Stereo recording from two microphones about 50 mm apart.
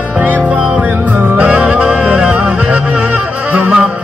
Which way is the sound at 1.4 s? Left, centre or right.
Right.